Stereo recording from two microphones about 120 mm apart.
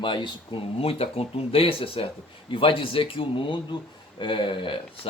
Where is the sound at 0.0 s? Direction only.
45° left (ahead or behind).